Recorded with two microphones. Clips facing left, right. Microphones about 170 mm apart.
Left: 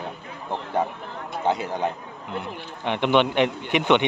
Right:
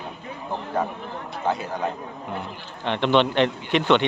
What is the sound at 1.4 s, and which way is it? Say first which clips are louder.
A man's voice: left 2 dB; 20° left (ahead or behind).